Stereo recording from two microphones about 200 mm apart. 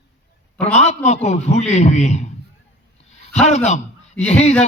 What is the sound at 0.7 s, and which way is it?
A man's voice, 35° left (ahead or behind).